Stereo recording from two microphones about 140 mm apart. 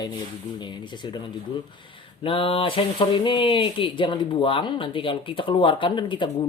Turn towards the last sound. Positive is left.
turn(degrees=35)  # may be behind; listen again after turning